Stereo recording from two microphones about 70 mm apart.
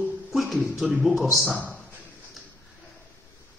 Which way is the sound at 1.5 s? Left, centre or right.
Centre.